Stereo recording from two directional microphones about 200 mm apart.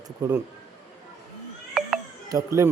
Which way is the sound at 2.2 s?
15° right (ahead or behind).